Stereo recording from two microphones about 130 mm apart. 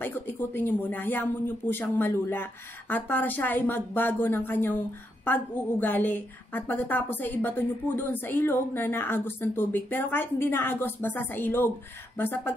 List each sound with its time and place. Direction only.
0.0 s a woman's voice: 15° left (ahead or behind)